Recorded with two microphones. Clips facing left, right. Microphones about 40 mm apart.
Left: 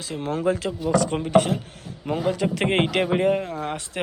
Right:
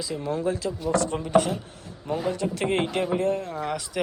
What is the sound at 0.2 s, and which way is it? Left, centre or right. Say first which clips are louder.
Speech: left 5 dB; left.